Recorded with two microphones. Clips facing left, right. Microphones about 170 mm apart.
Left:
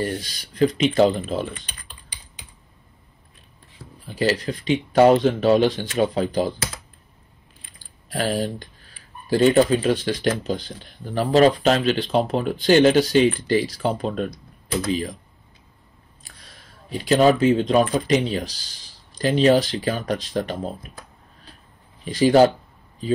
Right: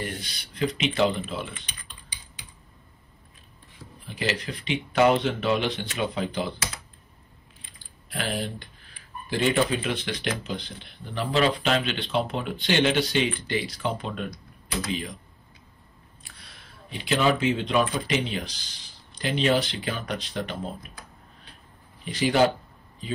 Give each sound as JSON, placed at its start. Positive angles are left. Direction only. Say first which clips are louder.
{"t": 0.6, "sound": "speech", "louder": "left 7 dB", "side_deg": 40}
{"t": 4.1, "sound": "speech", "louder": "left 7 dB", "side_deg": 35}
{"t": 8.1, "sound": "speech", "louder": "left 7 dB", "side_deg": 35}
{"t": 16.2, "sound": "speech", "louder": "left 2 dB", "side_deg": 40}
{"t": 22.0, "sound": "speech", "louder": "left 7 dB", "side_deg": 35}